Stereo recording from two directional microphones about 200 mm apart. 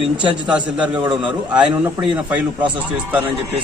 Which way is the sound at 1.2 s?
5° right (ahead or behind).